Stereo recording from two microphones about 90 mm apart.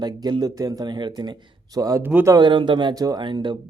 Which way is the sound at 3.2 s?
60° right (ahead or behind).